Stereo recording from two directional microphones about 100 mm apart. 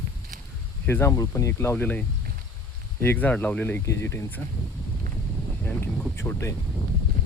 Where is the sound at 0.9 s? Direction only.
25° left (ahead or behind).